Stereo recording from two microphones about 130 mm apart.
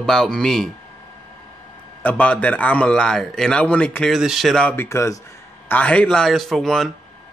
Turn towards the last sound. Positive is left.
turn(degrees=5)  # may be behind; listen again after turning